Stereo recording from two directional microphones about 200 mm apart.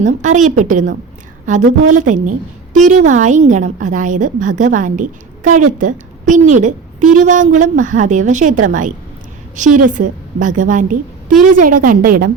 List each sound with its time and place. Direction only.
0.0 s a woman's voice: 40° right (ahead or behind)